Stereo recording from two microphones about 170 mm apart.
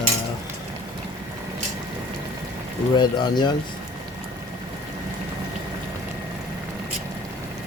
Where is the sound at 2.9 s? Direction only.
25° left (ahead or behind).